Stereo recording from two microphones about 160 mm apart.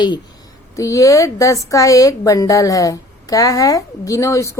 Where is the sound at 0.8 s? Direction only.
20° left (ahead or behind).